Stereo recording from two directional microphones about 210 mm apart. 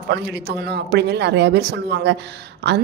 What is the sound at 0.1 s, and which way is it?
A woman's voice, 50° right (ahead or behind).